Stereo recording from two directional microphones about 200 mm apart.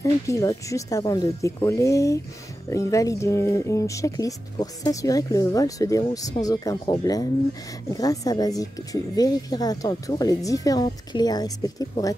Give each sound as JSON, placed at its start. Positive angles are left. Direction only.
{"t": 0.0, "sound": "speech", "side_deg": 15}